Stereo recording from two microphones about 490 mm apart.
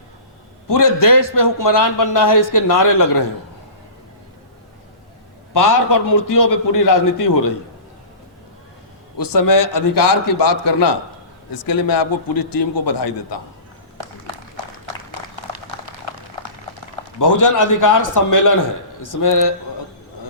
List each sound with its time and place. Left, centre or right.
0.7 s a man's voice: left
5.5 s a man's voice: left
9.1 s a man's voice: left
11.5 s a man's voice: left
15.1 s a sound: right
17.2 s a man's voice: left